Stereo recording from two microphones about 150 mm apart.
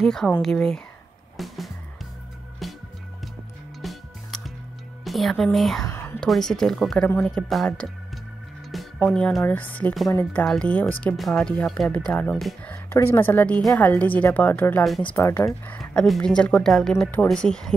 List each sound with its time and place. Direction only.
0.0 s speech: centre (ahead or behind)
1.3 s music: centre (ahead or behind)
3.8 s music: centre (ahead or behind)
5.0 s speech: centre (ahead or behind)
5.9 s whispering: 15° left (ahead or behind)
6.2 s speech: centre (ahead or behind)
8.7 s music: centre (ahead or behind)
9.1 s speech: 5° left (ahead or behind)
12.9 s speech: 15° left (ahead or behind)